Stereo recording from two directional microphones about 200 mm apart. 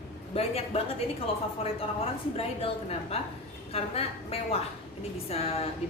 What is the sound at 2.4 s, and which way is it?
A woman's voice, 30° left (ahead or behind).